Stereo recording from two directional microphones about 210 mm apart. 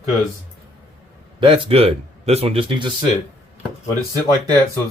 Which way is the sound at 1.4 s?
25° right (ahead or behind).